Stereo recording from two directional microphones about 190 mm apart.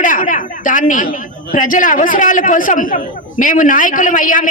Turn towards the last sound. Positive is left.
turn(degrees=45)  # may be behind; listen again after turning